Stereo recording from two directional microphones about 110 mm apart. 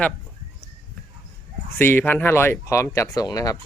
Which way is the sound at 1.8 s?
20° left (ahead or behind).